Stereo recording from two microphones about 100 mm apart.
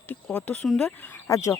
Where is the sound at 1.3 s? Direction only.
30° left (ahead or behind).